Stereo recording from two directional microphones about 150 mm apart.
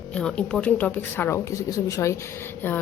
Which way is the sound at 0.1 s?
5° left (ahead or behind).